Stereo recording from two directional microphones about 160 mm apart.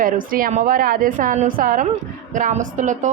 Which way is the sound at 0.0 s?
60° right (ahead or behind).